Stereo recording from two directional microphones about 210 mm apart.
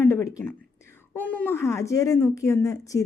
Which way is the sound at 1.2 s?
10° left (ahead or behind).